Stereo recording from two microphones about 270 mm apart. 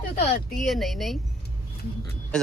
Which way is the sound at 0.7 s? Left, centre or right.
Centre.